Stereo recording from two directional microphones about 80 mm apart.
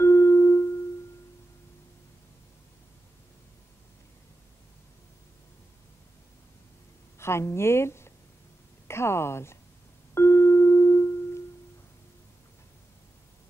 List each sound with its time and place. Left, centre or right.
0.0 s music: left
7.2 s speech: left
10.1 s music: left